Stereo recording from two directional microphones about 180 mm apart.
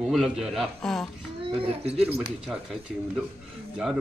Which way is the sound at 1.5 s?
35° right (ahead or behind).